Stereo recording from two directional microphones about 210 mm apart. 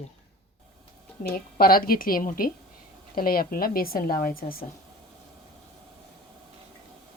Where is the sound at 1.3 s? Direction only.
45° left (ahead or behind).